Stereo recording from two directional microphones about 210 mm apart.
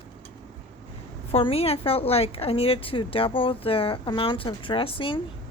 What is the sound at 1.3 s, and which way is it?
A woman's voice, 25° left (ahead or behind).